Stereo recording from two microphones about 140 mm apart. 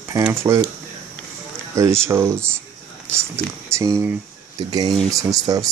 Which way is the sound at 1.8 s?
20° right (ahead or behind).